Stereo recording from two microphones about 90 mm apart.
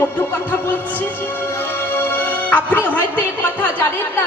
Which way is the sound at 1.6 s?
20° left (ahead or behind).